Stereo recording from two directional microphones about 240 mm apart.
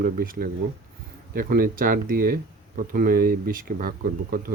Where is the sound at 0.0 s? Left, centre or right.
Right.